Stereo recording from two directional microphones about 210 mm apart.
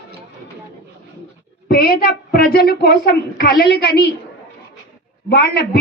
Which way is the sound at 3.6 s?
55° left (ahead or behind).